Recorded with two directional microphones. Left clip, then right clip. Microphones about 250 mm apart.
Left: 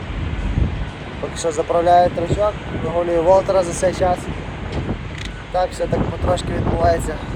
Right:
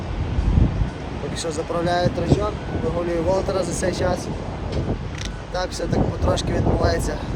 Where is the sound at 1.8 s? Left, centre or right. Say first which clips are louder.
Left 7 dB; centre.